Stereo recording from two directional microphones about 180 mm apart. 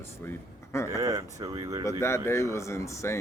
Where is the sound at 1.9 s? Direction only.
15° left (ahead or behind).